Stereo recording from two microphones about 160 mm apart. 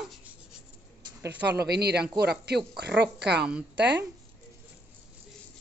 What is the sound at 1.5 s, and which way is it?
Speech, 90° right.